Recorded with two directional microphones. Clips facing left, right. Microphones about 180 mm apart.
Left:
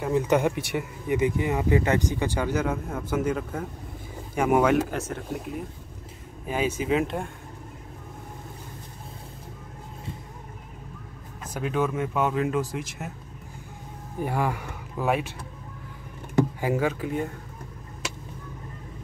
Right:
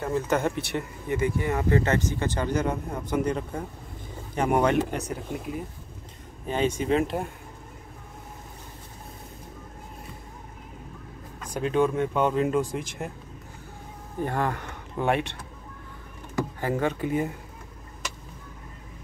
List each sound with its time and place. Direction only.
0.0 s speech: 15° left (ahead or behind)
11.5 s speech: 5° left (ahead or behind)
14.1 s speech: 10° left (ahead or behind)
16.6 s speech: 5° left (ahead or behind)